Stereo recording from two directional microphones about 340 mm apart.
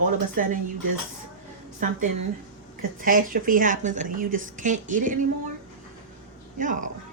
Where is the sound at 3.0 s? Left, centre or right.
Right.